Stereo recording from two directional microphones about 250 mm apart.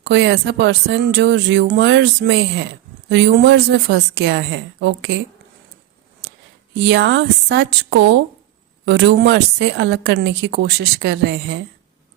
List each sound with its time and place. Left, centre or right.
0.0 s speech: right
6.7 s speech: right